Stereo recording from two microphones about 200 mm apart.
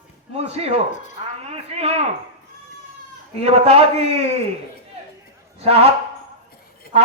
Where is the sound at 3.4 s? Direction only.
30° right (ahead or behind).